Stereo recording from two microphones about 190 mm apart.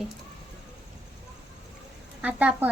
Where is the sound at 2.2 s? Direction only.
5° right (ahead or behind).